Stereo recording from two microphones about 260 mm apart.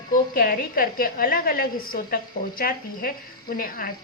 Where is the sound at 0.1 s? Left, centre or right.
Left.